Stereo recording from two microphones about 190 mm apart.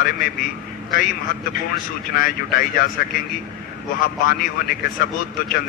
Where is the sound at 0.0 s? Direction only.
50° left (ahead or behind).